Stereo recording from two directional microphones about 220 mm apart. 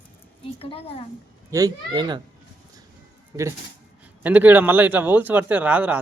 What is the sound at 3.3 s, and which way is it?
A man's voice, 10° right (ahead or behind).